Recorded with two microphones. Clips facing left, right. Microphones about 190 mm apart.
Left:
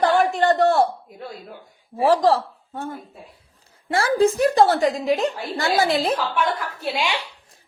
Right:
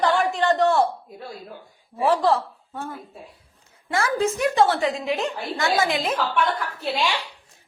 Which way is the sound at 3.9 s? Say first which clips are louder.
Left 5 dB; 30° left (ahead or behind).